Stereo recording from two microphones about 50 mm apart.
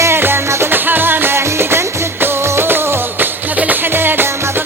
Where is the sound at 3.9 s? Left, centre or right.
Right.